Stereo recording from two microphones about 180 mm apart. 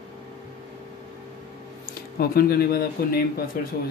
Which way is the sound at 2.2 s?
60° left (ahead or behind).